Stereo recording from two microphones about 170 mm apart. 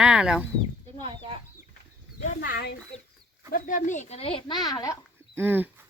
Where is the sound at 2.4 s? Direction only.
65° left (ahead or behind).